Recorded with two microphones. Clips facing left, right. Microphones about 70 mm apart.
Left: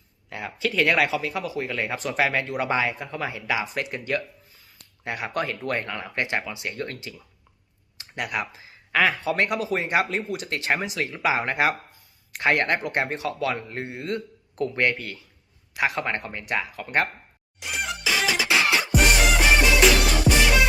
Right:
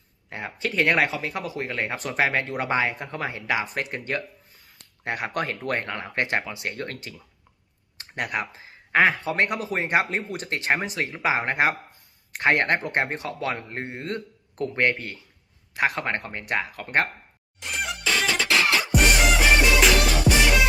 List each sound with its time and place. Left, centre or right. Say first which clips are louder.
0.3 s speech: left 2 dB; right
7.9 s speech: even; right
17.6 s music: even; centre